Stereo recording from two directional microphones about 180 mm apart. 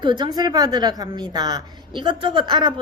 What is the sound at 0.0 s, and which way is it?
Speech, 25° right (ahead or behind).